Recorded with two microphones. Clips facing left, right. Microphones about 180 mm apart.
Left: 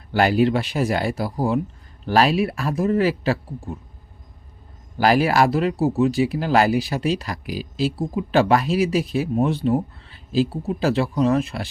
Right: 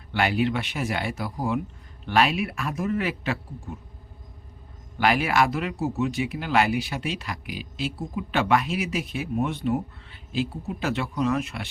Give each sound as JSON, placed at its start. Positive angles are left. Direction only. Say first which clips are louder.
{"t": 0.1, "sound": "speech", "louder": "left 6 dB", "side_deg": 40}
{"t": 4.9, "sound": "speech", "louder": "left 5 dB", "side_deg": 35}